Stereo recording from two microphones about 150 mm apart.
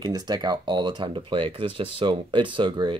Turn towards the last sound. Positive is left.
turn(degrees=-30)  # may be behind; listen again after turning